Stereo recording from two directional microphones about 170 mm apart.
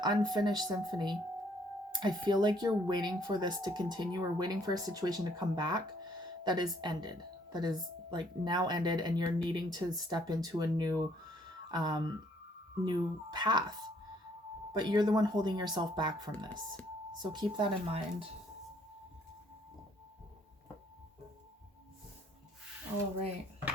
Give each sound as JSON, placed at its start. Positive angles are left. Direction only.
{"t": 0.0, "sound": "a woman's voice", "side_deg": -25}